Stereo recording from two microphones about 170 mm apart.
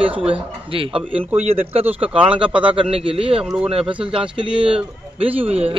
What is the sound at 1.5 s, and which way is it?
A man's voice, 35° right (ahead or behind).